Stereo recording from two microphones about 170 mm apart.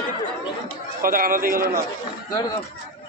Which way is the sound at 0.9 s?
55° right (ahead or behind).